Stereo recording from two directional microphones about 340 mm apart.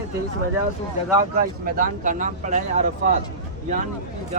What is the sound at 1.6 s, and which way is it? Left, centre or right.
Speech, right.